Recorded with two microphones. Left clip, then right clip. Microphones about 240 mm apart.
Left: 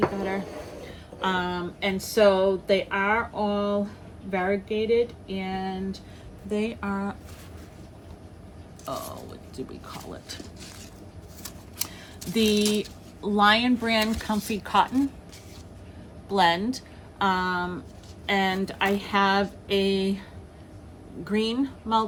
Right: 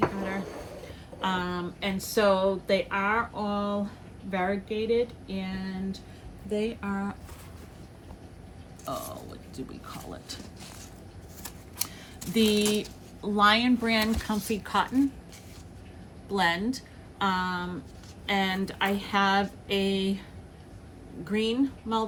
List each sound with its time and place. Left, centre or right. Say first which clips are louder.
0.9 s speech: left 3 dB; centre
6.5 s speech: left 2 dB; left
8.9 s speech: left 2 dB; centre
12.3 s speech: left 1 dB; centre
16.3 s a woman's voice: left 5 dB; centre
21.2 s speech: left 1 dB; centre